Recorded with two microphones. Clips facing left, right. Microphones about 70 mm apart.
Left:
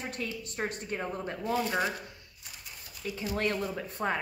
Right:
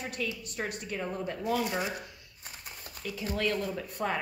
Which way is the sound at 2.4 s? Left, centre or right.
Right.